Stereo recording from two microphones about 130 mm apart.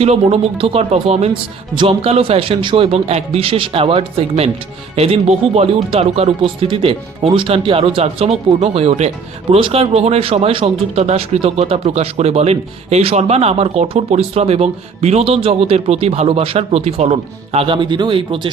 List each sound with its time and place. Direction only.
0.0 s speech: 55° right (ahead or behind)
1.7 s speech: 40° right (ahead or behind)
9.6 s speech: 40° right (ahead or behind)
17.7 s speech: 35° right (ahead or behind)